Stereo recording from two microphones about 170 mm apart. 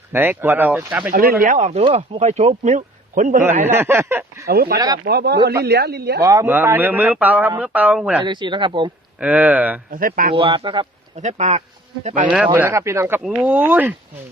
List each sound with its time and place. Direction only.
0.1 s speech: 10° right (ahead or behind)
1.1 s speech: 60° right (ahead or behind)
3.6 s speech: 15° right (ahead or behind)
4.4 s speech: 65° right (ahead or behind)
6.2 s speech: 15° right (ahead or behind)
8.2 s speech: 25° right (ahead or behind)
9.2 s speech: 10° right (ahead or behind)
9.9 s speech: 55° right (ahead or behind)
10.3 s speech: 30° right (ahead or behind)
11.2 s speech: 45° right (ahead or behind)
12.5 s speech: 15° right (ahead or behind)